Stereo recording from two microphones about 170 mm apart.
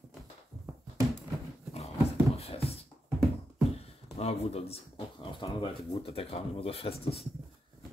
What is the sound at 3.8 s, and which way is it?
Speech, 35° left (ahead or behind).